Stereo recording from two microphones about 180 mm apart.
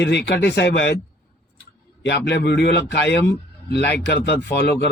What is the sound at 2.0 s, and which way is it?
A man's voice, 70° left (ahead or behind).